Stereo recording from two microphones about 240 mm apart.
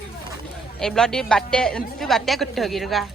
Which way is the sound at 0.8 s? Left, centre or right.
Centre.